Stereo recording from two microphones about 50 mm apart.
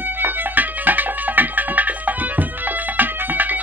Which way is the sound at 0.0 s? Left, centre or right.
Right.